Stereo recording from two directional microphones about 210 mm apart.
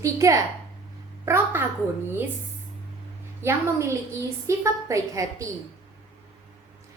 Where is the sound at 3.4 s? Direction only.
10° right (ahead or behind).